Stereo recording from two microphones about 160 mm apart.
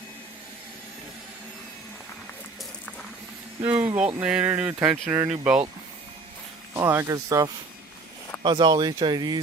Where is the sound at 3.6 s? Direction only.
10° right (ahead or behind).